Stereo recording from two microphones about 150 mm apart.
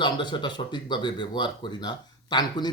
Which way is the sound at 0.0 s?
30° left (ahead or behind).